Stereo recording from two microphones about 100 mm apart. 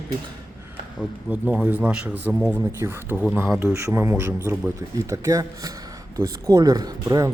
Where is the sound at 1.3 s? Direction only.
15° right (ahead or behind).